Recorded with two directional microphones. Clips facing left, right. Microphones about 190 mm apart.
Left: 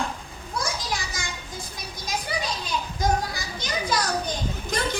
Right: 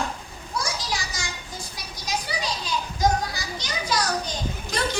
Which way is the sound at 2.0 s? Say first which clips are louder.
Even; 55° left (ahead or behind).